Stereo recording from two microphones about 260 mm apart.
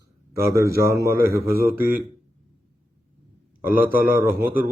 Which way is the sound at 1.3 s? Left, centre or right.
Centre.